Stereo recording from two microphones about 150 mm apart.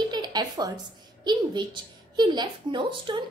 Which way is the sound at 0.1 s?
30° right (ahead or behind).